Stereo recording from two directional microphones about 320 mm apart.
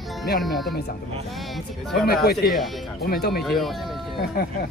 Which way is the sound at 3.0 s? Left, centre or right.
Left.